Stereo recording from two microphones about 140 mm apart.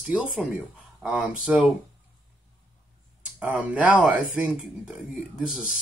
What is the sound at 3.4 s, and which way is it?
Speech, 10° right (ahead or behind).